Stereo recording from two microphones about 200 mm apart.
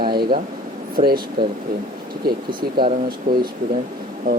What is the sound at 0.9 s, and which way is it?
Speech, 50° right (ahead or behind).